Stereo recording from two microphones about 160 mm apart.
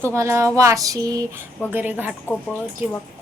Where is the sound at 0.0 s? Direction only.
15° right (ahead or behind).